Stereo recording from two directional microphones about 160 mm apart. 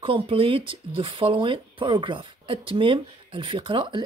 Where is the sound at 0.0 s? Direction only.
35° right (ahead or behind).